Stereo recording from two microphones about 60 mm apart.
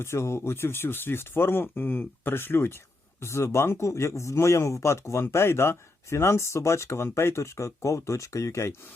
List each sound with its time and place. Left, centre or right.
0.0 s speech: left
3.2 s speech: left